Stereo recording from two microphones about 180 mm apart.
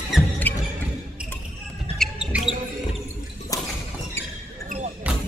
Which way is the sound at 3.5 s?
20° left (ahead or behind).